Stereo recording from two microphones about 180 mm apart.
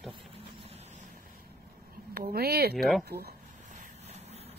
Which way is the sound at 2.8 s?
Centre (ahead or behind).